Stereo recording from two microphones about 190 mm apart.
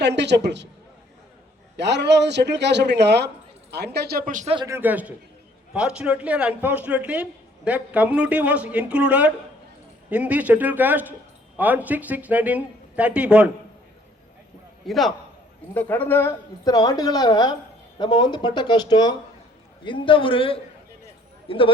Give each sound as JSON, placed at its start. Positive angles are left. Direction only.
{"t": 0.0, "sound": "a man's voice", "side_deg": -65}
{"t": 1.7, "sound": "a man's voice", "side_deg": -65}
{"t": 4.4, "sound": "speech", "side_deg": -25}
{"t": 4.7, "sound": "a man's voice", "side_deg": -10}
{"t": 14.8, "sound": "a man's voice", "side_deg": 0}